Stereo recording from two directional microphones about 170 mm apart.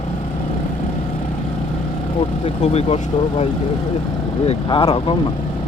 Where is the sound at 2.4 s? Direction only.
40° left (ahead or behind).